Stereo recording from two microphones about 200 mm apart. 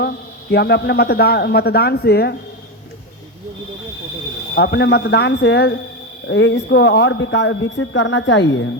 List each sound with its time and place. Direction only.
0.5 s a man's voice: 55° left (ahead or behind)
4.5 s speech: 55° left (ahead or behind); by 8.7 s 75° left (ahead or behind)